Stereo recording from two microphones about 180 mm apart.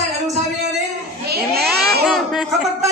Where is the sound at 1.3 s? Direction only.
60° right (ahead or behind).